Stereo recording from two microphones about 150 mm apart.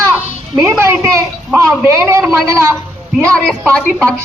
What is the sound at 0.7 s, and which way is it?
A man's voice, 20° right (ahead or behind).